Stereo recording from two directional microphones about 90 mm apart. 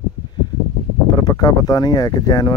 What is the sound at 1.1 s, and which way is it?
Speech, 45° left (ahead or behind).